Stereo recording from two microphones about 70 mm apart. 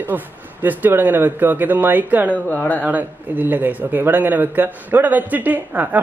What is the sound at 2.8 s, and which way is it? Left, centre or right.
A man's voice, right.